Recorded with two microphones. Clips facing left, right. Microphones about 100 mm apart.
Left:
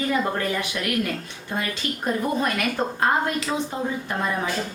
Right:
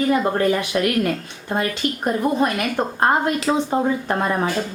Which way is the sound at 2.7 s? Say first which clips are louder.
Right 4 dB; 45° right (ahead or behind).